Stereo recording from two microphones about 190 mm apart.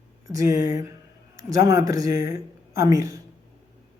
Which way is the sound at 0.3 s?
15° right (ahead or behind).